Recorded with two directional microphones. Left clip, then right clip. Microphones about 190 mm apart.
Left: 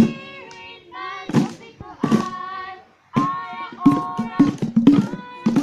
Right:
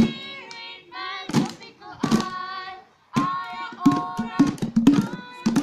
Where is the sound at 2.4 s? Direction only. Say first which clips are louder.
Left 2 dB; 45° right (ahead or behind).